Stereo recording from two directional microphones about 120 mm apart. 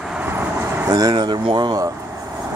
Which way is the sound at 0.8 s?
30° right (ahead or behind).